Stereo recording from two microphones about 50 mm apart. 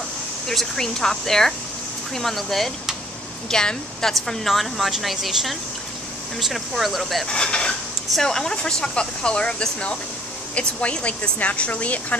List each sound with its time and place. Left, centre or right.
0.5 s a woman's voice: centre
4.1 s a woman's voice: centre
7.2 s a woman's voice: centre